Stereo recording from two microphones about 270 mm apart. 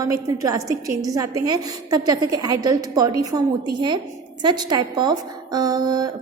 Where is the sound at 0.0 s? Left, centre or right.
Centre.